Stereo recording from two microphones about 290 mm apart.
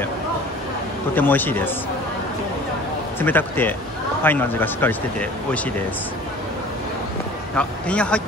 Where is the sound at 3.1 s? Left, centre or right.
Centre.